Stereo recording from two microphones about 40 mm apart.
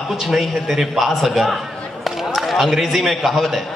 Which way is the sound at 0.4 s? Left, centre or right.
Centre.